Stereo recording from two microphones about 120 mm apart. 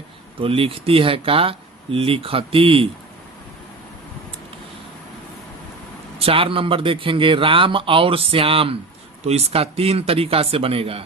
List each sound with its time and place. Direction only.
0.3 s a man's voice: 50° right (ahead or behind)
6.1 s a man's voice: 50° right (ahead or behind)